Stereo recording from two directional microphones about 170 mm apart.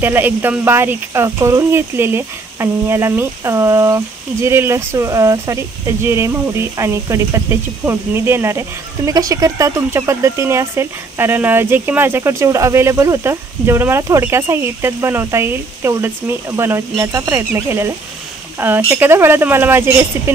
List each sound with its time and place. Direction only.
0.0 s speech: 10° right (ahead or behind)